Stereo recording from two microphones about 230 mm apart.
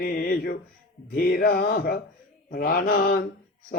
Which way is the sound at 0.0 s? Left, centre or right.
Left.